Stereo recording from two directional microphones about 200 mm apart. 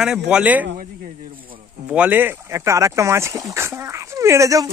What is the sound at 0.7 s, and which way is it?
Speech, 45° right (ahead or behind).